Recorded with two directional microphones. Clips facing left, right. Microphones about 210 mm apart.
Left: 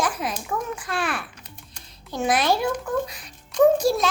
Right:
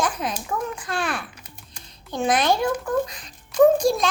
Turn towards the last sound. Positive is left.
turn(degrees=5)  # may be behind; listen again after turning